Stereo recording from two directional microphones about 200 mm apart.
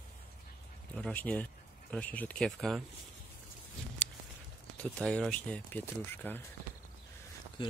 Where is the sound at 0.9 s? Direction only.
5° left (ahead or behind).